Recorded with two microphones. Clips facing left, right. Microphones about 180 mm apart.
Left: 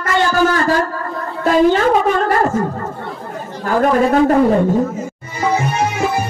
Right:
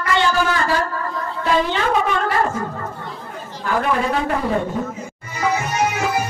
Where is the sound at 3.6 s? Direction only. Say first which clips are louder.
Left 6 dB; 45° left (ahead or behind).